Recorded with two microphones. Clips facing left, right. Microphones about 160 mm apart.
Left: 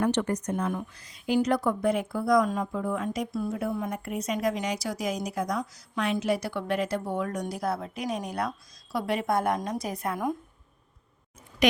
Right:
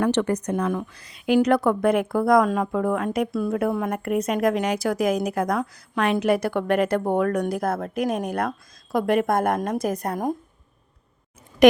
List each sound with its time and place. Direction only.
0.0 s a woman's voice: 75° right (ahead or behind); by 10.3 s 40° right (ahead or behind)
11.6 s speech: 50° right (ahead or behind)